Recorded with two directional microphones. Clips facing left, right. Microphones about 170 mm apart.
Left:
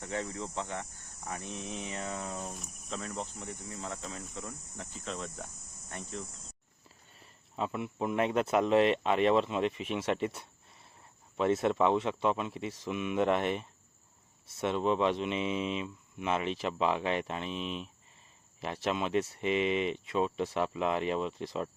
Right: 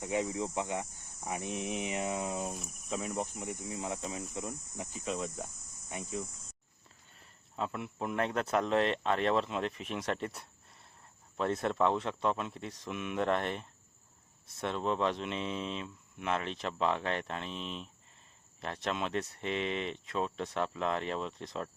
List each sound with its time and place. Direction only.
0.0 s speech: 15° right (ahead or behind)
2.5 s speech: centre (ahead or behind)
3.0 s speech: 10° right (ahead or behind)